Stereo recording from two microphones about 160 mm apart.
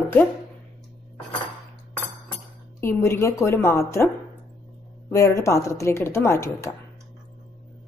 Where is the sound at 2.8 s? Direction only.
15° left (ahead or behind).